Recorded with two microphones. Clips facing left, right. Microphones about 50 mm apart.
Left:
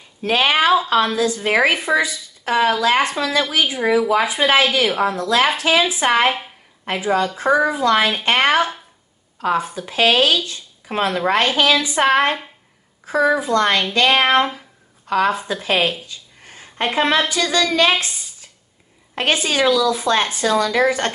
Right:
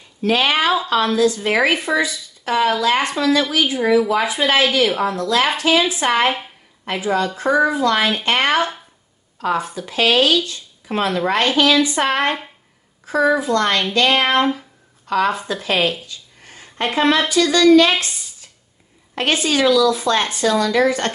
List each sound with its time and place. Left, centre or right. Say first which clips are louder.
0.2 s a woman's voice: left 1 dB; left
6.3 s a sound: even; centre
6.9 s a woman's voice: left 1 dB; centre
8.5 s speech: left 1 dB; centre
9.5 s a woman's voice: left 1 dB; centre
16.1 s a sound: even; left
16.8 s a woman's voice: right 1 dB; left
19.1 s a woman's voice: even; left